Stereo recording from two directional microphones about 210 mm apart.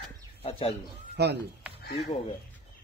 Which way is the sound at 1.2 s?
50° right (ahead or behind).